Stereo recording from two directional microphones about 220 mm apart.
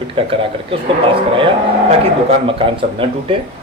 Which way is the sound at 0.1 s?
25° right (ahead or behind).